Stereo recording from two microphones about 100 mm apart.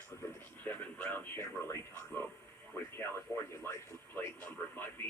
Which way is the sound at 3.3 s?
30° left (ahead or behind).